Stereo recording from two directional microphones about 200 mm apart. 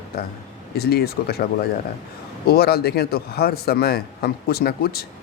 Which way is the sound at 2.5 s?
50° left (ahead or behind).